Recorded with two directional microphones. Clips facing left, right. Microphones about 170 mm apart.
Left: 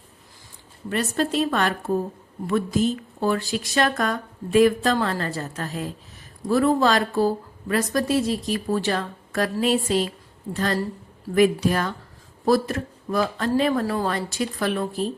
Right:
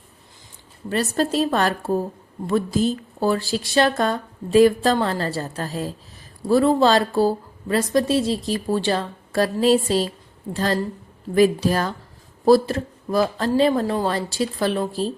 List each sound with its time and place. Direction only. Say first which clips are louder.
0.9 s a woman's voice: right 2 dB; 35° right (ahead or behind)